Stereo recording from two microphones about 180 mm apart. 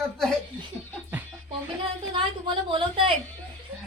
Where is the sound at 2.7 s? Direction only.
30° right (ahead or behind).